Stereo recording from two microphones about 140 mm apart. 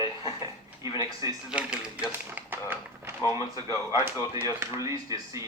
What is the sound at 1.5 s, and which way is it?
Speech, 5° right (ahead or behind).